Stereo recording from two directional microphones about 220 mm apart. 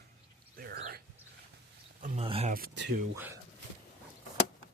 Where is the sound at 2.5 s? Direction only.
45° right (ahead or behind).